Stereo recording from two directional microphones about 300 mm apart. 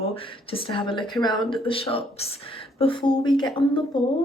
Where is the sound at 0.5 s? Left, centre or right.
Centre.